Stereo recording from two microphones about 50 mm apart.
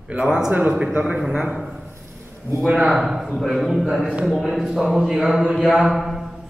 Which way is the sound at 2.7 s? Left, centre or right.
Centre.